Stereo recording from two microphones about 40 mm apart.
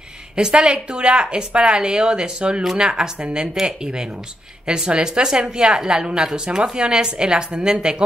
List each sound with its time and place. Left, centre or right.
0.4 s a woman's voice: right